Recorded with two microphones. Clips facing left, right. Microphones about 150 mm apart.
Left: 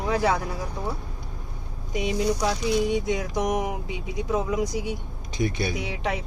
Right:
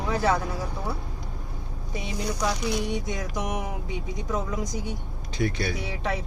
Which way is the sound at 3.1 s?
15° left (ahead or behind).